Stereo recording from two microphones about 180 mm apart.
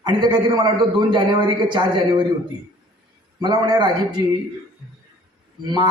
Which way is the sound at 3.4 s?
25° right (ahead or behind).